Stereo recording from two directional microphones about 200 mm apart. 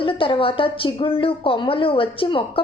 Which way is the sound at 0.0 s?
25° left (ahead or behind).